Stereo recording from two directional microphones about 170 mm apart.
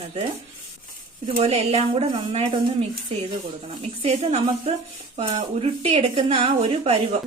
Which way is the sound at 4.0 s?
35° right (ahead or behind).